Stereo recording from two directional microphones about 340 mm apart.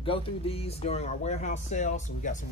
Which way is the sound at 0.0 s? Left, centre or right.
Centre.